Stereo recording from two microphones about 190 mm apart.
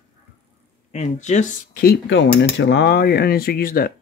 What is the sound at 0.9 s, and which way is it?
Speech, 35° left (ahead or behind).